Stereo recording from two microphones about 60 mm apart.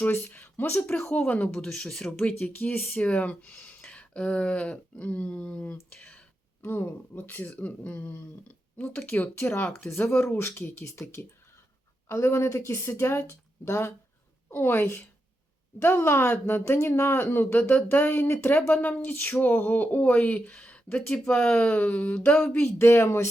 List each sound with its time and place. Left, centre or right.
0.0 s speech: left
0.9 s speech: centre
2.4 s speech: left
3.0 s speech: left
6.6 s speech: left
10.3 s speech: left
22.5 s speech: left